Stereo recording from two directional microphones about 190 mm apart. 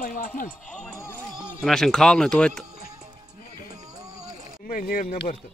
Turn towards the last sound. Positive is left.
turn(degrees=45)  # may be behind; listen again after turning